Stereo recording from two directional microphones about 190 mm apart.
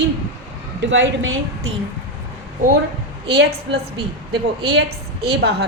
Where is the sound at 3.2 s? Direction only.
60° right (ahead or behind).